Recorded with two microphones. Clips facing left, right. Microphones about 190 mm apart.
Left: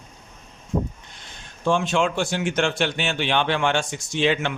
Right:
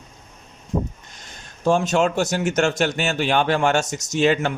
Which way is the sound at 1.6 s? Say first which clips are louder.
Right 3 dB; 40° right (ahead or behind).